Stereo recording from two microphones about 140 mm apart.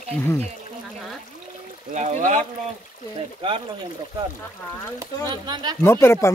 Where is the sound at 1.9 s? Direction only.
55° right (ahead or behind).